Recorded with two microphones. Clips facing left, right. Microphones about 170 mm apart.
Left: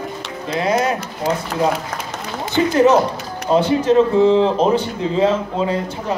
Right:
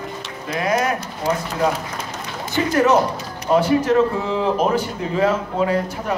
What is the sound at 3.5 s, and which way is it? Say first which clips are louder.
Speech: left 1 dB; 25° left (ahead or behind).